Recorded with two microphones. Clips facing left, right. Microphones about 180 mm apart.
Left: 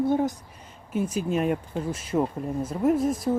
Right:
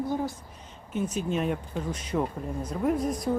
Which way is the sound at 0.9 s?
10° left (ahead or behind).